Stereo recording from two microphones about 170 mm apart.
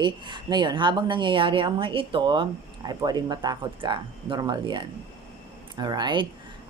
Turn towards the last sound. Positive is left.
turn(degrees=-25)  # may be behind; listen again after turning